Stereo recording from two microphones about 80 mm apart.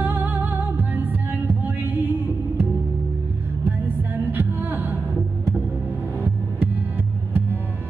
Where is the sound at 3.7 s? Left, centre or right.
Right.